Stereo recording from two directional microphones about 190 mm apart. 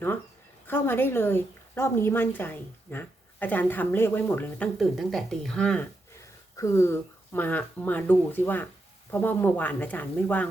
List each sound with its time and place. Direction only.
0.7 s a woman's voice: 10° left (ahead or behind)